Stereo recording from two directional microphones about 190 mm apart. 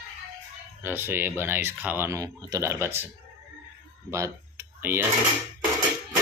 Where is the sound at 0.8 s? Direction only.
10° right (ahead or behind).